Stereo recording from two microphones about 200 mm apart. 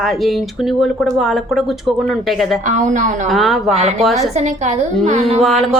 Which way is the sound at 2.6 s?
40° right (ahead or behind).